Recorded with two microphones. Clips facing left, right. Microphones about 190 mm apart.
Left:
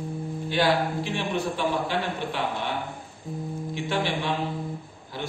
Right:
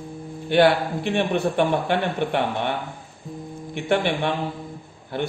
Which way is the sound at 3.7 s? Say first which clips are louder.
Right 6 dB; 60° right (ahead or behind).